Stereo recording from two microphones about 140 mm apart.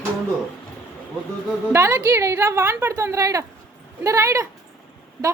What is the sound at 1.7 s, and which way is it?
A woman's voice, 20° right (ahead or behind).